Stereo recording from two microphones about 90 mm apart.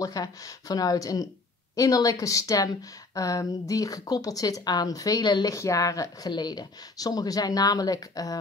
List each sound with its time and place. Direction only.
0.0 s speech: 45° left (ahead or behind)
5.5 s speech: 35° left (ahead or behind)